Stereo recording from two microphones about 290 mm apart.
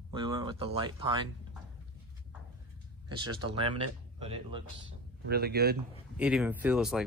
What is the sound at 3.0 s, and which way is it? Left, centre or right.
Speech, centre.